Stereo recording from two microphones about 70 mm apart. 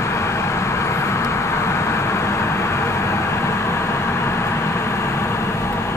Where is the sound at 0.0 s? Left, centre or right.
Left.